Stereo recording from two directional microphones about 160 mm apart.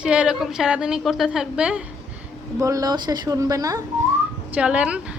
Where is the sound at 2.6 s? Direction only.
20° right (ahead or behind).